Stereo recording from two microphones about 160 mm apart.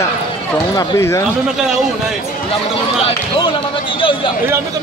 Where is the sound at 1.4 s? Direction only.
5° right (ahead or behind).